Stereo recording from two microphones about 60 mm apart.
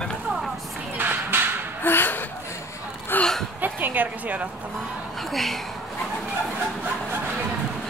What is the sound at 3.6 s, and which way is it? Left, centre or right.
Speech, right.